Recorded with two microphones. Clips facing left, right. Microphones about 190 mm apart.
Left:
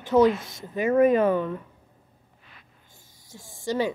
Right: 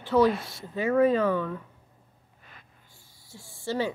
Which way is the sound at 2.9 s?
20° left (ahead or behind).